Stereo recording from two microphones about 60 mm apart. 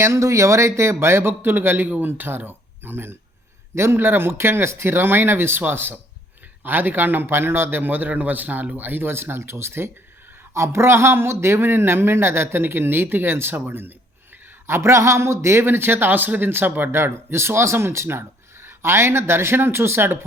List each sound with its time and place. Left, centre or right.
0.0 s speech: right
14.7 s speech: right